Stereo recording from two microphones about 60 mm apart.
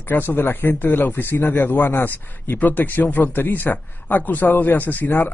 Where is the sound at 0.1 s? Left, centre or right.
Left.